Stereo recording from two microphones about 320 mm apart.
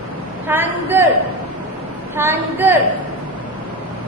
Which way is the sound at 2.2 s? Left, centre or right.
Centre.